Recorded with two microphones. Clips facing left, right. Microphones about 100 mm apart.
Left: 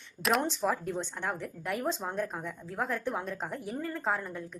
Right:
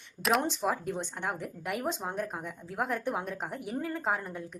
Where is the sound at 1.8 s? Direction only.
10° right (ahead or behind).